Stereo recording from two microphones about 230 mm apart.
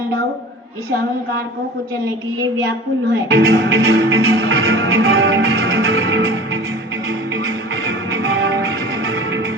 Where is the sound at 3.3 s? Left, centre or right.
Right.